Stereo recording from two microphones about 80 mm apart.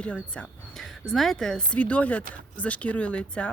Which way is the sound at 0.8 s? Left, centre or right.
Centre.